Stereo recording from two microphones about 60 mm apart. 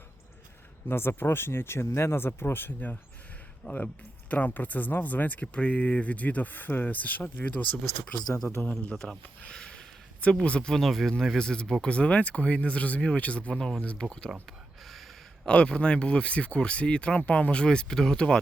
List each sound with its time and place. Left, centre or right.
0.9 s speech: left
3.6 s speech: left
9.5 s sniff: centre
10.4 s speech: centre
13.5 s speech: centre
14.4 s a sound: centre
15.4 s speech: centre